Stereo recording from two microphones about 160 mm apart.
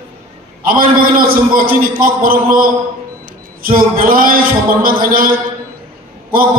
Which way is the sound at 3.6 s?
65° right (ahead or behind).